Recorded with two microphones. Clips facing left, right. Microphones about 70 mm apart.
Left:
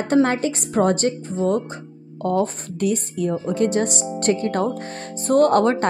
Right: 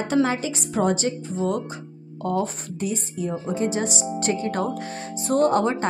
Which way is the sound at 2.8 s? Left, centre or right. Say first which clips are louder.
Left 6 dB; left.